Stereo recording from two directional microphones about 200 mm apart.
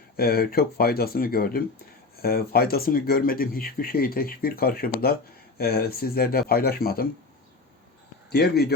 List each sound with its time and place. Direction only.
0.2 s speech: 50° left (ahead or behind)
8.3 s speech: 55° left (ahead or behind)